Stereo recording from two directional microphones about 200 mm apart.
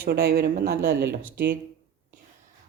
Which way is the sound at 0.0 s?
50° right (ahead or behind).